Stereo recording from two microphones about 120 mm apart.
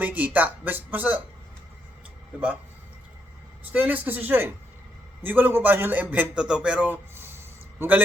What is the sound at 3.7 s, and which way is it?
A man's voice, 15° right (ahead or behind).